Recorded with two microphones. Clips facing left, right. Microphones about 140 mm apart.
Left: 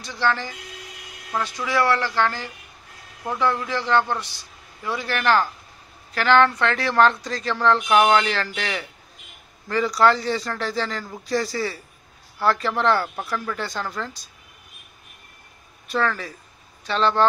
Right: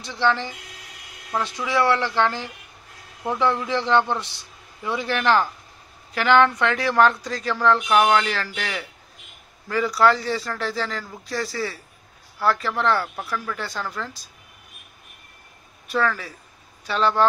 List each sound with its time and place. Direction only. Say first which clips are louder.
0.0 s speech: right 2 dB; 25° right (ahead or behind)
1.7 s speech: right 1 dB; 20° right (ahead or behind); by 13.2 s centre (ahead or behind)
13.2 s speech: left 1 dB; 10° left (ahead or behind)
13.6 s speech: left 1 dB; centre (ahead or behind)
15.9 s speech: even; 5° right (ahead or behind)